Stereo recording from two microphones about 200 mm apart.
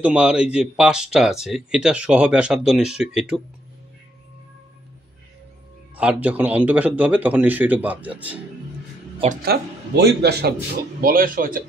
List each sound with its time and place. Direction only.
0.0 s speech: 5° right (ahead or behind)
5.9 s speech: 5° right (ahead or behind)
9.4 s a man's voice: 55° right (ahead or behind)